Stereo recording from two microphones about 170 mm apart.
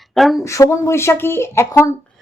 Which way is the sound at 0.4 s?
15° left (ahead or behind).